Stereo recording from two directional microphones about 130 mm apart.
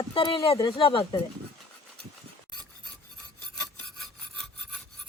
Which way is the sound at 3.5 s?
5° left (ahead or behind).